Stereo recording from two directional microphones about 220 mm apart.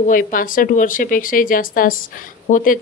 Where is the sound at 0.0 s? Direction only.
40° left (ahead or behind).